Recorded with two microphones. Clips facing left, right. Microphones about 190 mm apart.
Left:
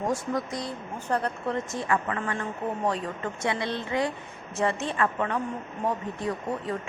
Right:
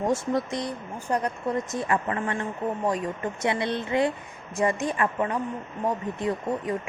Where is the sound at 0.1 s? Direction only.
25° right (ahead or behind).